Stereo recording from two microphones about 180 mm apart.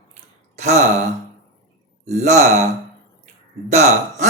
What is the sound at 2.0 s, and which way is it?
Speech, 40° right (ahead or behind).